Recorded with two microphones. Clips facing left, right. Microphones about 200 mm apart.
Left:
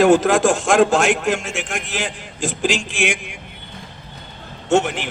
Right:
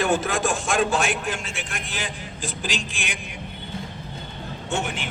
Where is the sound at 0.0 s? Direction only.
75° left (ahead or behind).